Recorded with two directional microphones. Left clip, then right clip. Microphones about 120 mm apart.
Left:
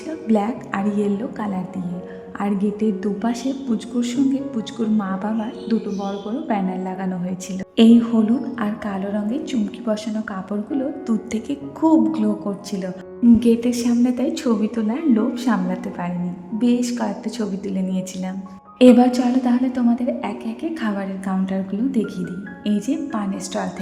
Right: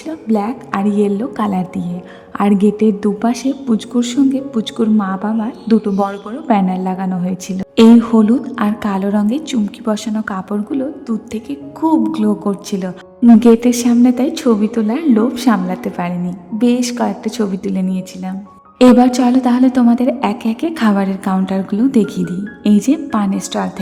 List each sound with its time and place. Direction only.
0.3 s speech: 15° right (ahead or behind)
0.7 s a woman's voice: 30° right (ahead or behind)
6.5 s a woman's voice: 40° right (ahead or behind)
11.3 s speech: 5° right (ahead or behind)
12.1 s a woman's voice: 30° right (ahead or behind)
17.9 s a woman's voice: 20° right (ahead or behind)
19.1 s a woman's voice: 35° right (ahead or behind)